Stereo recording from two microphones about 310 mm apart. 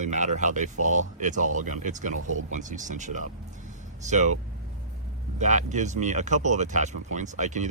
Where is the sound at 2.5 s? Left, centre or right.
Right.